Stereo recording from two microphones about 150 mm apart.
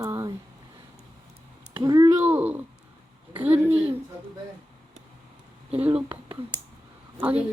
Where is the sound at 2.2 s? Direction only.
10° right (ahead or behind).